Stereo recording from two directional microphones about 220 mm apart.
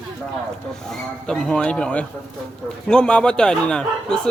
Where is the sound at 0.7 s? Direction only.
Centre (ahead or behind).